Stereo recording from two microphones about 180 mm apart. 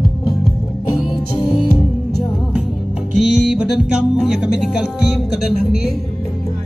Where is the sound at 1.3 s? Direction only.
30° left (ahead or behind).